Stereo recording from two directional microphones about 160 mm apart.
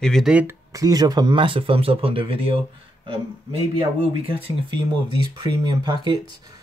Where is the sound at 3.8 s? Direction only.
35° right (ahead or behind).